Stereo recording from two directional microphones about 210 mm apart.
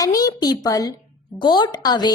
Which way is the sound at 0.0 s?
15° left (ahead or behind).